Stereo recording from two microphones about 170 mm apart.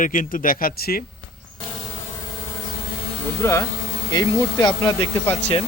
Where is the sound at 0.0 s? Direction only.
50° left (ahead or behind).